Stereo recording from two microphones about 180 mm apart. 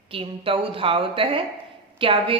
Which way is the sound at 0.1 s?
30° right (ahead or behind).